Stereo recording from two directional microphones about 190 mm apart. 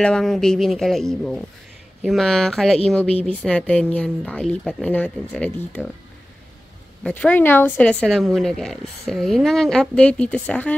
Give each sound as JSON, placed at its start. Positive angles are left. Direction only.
{"t": 0.0, "sound": "speech", "side_deg": 5}
{"t": 7.0, "sound": "speech", "side_deg": 5}